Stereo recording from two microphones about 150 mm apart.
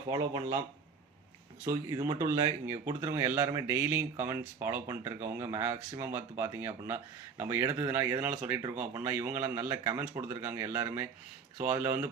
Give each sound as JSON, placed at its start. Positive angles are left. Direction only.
{"t": 0.1, "sound": "speech", "side_deg": -25}
{"t": 1.6, "sound": "speech", "side_deg": -20}